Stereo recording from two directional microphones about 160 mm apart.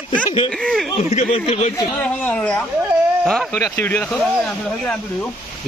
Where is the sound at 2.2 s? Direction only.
10° left (ahead or behind).